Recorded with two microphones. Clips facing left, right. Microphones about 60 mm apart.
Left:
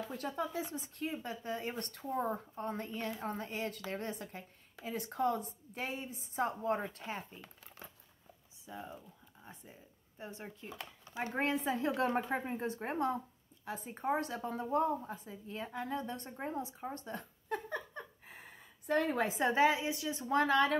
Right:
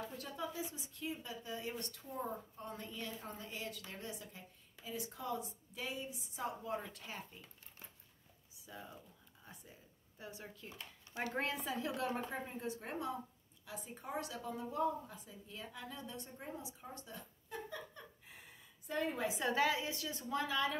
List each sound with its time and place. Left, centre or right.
0.2 s a woman's voice: left
8.6 s a woman's voice: left
17.2 s a sound: left
18.9 s a woman's voice: left
19.2 s a woman's voice: left
20.2 s a woman's voice: left